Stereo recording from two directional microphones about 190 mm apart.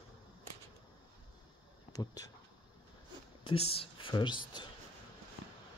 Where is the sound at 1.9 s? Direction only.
20° left (ahead or behind).